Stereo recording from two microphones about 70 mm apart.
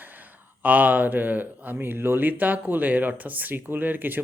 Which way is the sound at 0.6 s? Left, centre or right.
Right.